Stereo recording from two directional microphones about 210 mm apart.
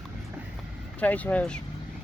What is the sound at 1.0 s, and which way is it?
Speech, 5° left (ahead or behind).